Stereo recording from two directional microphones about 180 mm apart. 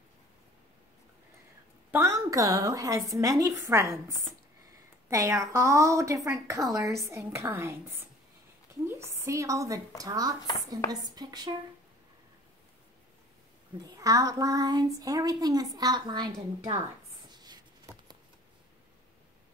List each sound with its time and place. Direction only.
1.9 s a woman's voice: 15° right (ahead or behind)
5.1 s a woman's voice: 15° right (ahead or behind)
9.2 s a woman's voice: 15° right (ahead or behind)
13.8 s speech: 20° right (ahead or behind)
17.3 s a sound: 20° right (ahead or behind)